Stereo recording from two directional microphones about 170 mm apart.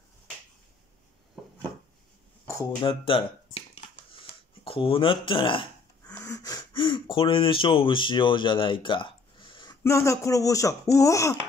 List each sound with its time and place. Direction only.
2.8 s a sound: 30° left (ahead or behind)
4.6 s speech: 35° left (ahead or behind)
9.8 s speech: 15° left (ahead or behind)